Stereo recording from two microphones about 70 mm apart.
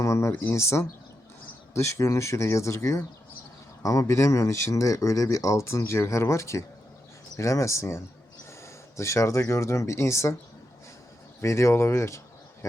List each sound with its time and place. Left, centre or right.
0.0 s speech: left
11.3 s speech: left